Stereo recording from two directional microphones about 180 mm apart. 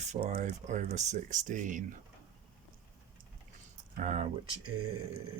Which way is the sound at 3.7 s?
40° right (ahead or behind).